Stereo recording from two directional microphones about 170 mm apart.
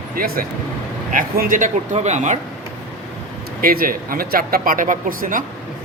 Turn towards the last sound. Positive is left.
turn(degrees=-50)  # may be behind; listen again after turning